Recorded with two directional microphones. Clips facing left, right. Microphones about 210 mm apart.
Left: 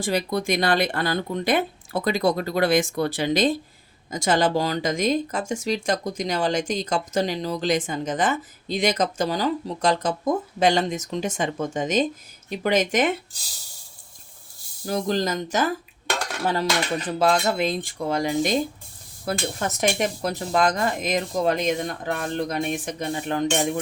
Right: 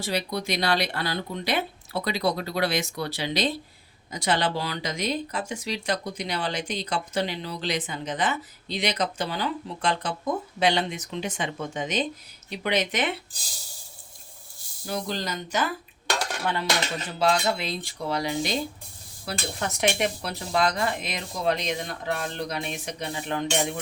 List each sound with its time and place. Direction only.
0.0 s speech: 50° left (ahead or behind)
14.8 s speech: 45° left (ahead or behind)
17.1 s speech: 50° left (ahead or behind)